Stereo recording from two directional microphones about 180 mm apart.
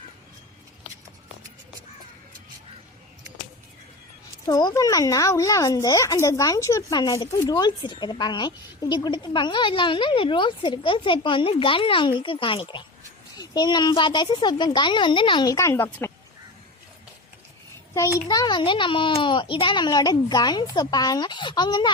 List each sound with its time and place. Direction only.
4.4 s speech: 20° left (ahead or behind)
18.3 s a child's voice: 25° left (ahead or behind)